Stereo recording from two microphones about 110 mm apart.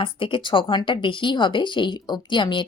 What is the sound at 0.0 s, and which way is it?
Speech, 50° left (ahead or behind).